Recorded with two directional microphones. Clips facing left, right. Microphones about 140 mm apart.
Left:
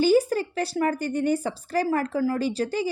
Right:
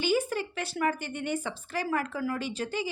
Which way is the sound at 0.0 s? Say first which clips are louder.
Left 8 dB; 40° left (ahead or behind).